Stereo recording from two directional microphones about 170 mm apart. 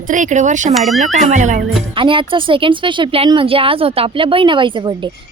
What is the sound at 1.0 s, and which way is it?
Speech, 45° right (ahead or behind).